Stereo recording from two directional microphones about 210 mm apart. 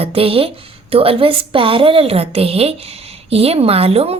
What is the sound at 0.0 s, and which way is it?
A woman's voice, 25° right (ahead or behind).